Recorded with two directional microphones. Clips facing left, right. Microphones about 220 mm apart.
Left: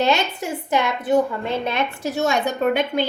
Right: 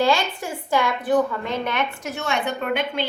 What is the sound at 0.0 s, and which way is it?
A woman's voice, 20° left (ahead or behind).